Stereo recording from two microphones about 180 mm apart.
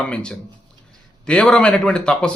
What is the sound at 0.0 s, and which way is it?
Speech, 5° left (ahead or behind).